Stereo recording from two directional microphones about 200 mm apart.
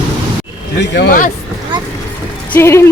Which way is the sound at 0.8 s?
55° left (ahead or behind).